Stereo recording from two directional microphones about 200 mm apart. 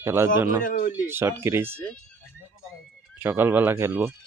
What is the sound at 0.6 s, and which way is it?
Speech, 45° left (ahead or behind).